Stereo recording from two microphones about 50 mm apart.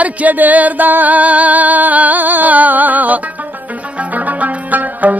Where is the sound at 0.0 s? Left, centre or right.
Right.